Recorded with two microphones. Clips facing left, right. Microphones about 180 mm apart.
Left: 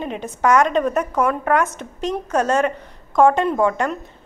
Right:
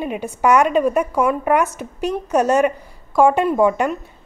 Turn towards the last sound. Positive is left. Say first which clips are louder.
# right 3 dB
turn(degrees=-15)  # may be behind; listen again after turning